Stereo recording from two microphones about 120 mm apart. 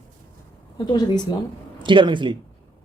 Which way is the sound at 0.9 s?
35° left (ahead or behind).